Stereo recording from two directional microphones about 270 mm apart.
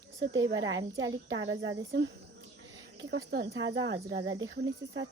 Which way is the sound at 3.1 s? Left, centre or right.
Right.